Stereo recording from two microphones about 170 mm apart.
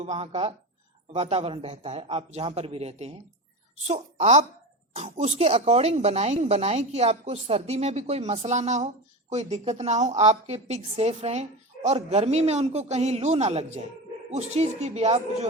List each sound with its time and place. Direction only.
0.0 s speech: 35° right (ahead or behind)